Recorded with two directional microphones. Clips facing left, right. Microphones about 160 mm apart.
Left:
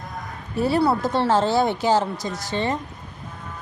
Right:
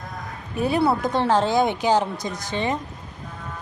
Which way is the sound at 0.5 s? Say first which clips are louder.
Left 1 dB; 15° right (ahead or behind).